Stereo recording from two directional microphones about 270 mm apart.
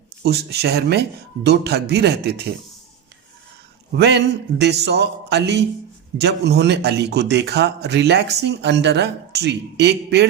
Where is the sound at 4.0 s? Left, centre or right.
Right.